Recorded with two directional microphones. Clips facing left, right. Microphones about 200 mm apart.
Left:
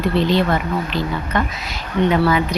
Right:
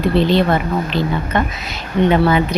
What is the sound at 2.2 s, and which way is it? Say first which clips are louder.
Speech: right 2 dB; 25° right (ahead or behind).